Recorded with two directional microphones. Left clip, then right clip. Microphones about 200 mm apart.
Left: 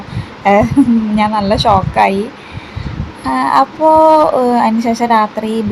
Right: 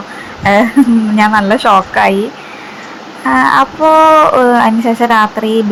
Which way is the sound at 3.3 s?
10° right (ahead or behind).